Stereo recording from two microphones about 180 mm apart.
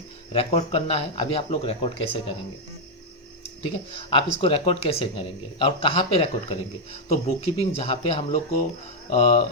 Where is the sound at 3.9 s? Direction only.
30° left (ahead or behind).